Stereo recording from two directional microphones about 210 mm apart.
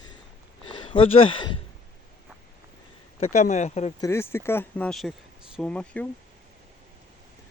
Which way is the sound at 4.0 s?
10° left (ahead or behind).